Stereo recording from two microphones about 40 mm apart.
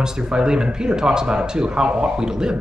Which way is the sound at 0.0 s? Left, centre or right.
Centre.